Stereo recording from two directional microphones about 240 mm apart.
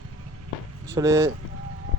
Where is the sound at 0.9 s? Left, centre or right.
Centre.